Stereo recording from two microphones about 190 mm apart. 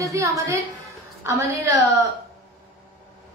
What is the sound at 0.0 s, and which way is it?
Speech, 15° right (ahead or behind).